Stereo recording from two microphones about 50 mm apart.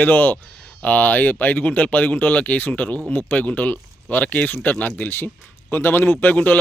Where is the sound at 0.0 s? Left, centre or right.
Left.